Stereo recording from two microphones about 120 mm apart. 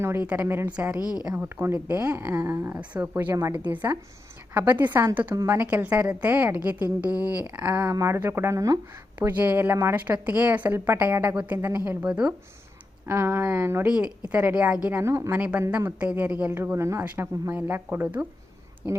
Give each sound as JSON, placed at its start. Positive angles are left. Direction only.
{"t": 0.0, "sound": "a woman's voice", "side_deg": -20}
{"t": 0.9, "sound": "a woman's voice", "side_deg": 30}
{"t": 1.2, "sound": "a woman's voice", "side_deg": -10}
{"t": 7.9, "sound": "speech", "side_deg": -25}
{"t": 9.4, "sound": "a woman's voice", "side_deg": -15}
{"t": 13.1, "sound": "speech", "side_deg": -20}
{"t": 13.8, "sound": "a woman's voice", "side_deg": -10}
{"t": 14.8, "sound": "speech", "side_deg": -20}
{"t": 15.4, "sound": "a woman's voice", "side_deg": -10}